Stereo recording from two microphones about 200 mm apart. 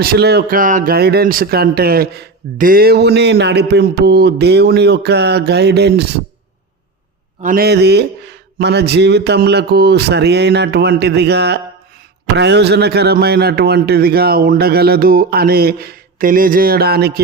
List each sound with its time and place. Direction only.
0.0 s a man's voice: 50° right (ahead or behind)
7.4 s a man's voice: 50° right (ahead or behind)